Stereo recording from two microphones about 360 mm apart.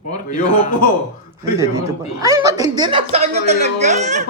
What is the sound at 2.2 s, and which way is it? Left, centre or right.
Speech, centre.